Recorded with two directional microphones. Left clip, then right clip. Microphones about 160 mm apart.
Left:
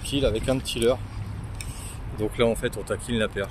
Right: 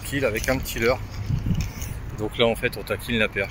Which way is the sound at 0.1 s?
20° left (ahead or behind).